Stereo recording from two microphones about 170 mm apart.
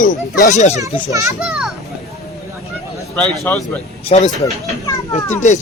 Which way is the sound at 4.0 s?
40° left (ahead or behind).